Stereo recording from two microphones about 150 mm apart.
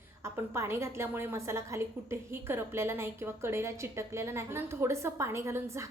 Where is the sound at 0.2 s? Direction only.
15° right (ahead or behind).